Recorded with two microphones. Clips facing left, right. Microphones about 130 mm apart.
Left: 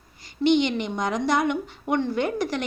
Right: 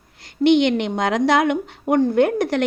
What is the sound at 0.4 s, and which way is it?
A woman's voice, 60° right (ahead or behind).